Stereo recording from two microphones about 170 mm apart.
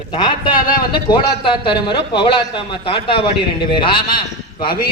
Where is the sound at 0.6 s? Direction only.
55° left (ahead or behind).